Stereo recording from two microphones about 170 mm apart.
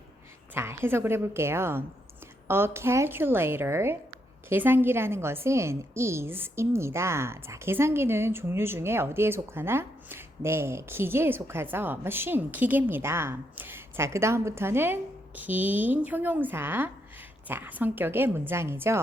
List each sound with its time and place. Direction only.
0.5 s a woman's voice: 15° right (ahead or behind)